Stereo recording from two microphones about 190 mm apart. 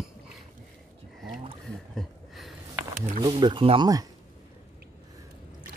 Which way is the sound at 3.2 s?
25° right (ahead or behind).